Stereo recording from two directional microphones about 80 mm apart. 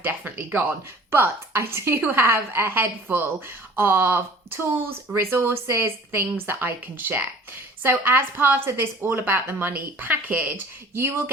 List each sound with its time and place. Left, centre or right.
0.0 s speech: right